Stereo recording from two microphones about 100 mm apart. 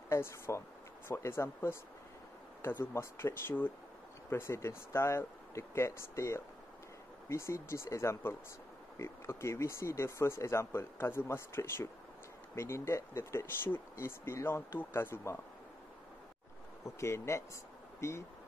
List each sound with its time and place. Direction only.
0.1 s speech: 25° left (ahead or behind)
16.8 s speech: 25° left (ahead or behind)